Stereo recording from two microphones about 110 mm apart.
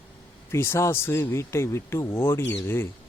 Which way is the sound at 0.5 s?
25° left (ahead or behind).